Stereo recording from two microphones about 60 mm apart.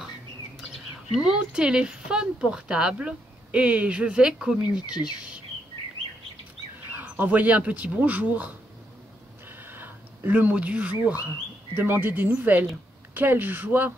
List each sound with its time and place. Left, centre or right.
1.2 s speech: centre
6.9 s speech: right
9.5 s a sound: right
10.5 s speech: right